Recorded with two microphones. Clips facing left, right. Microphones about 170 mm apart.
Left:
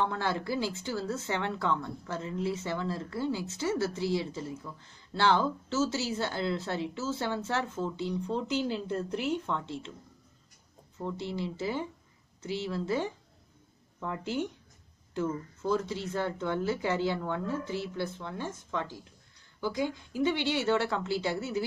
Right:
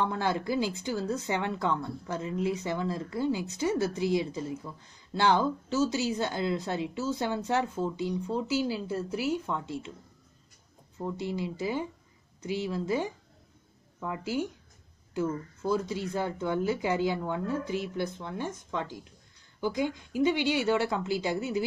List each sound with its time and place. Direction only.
0.0 s speech: 15° right (ahead or behind)
11.0 s speech: 10° right (ahead or behind)